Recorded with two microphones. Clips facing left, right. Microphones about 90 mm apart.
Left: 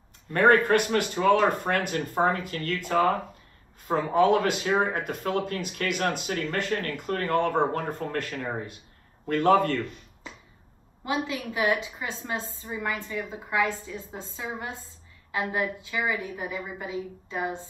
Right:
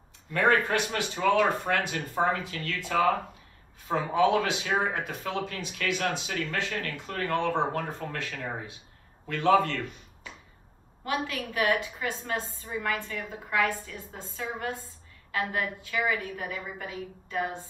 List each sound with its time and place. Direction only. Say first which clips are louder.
0.3 s speech: left 5 dB; 50° left (ahead or behind)
11.1 s a woman's voice: left 2 dB; 20° left (ahead or behind)